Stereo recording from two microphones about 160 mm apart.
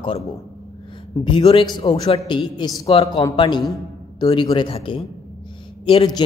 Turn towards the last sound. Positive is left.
turn(degrees=30)  # may be behind; listen again after turning